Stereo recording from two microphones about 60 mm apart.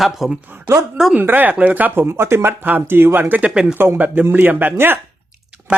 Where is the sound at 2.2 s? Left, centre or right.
Right.